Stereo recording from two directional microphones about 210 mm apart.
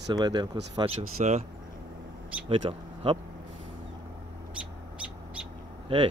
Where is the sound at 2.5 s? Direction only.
25° right (ahead or behind).